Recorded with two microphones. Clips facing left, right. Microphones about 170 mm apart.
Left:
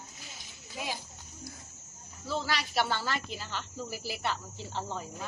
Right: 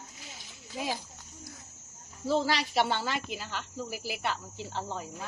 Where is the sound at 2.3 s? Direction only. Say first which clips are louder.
Right 6 dB; 35° right (ahead or behind).